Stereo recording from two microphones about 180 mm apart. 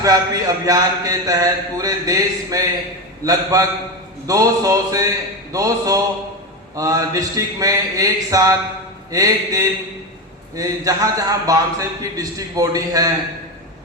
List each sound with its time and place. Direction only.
0.0 s speech: 20° right (ahead or behind)